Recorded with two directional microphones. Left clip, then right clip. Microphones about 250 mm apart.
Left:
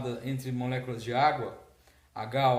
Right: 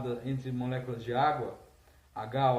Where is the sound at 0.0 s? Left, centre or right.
Left.